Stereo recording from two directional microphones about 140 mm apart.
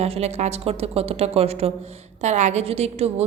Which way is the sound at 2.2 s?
55° right (ahead or behind).